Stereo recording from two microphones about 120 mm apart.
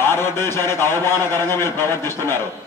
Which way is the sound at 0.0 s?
20° left (ahead or behind).